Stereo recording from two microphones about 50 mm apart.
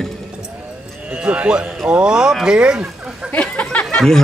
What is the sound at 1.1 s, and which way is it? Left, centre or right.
Speech, right.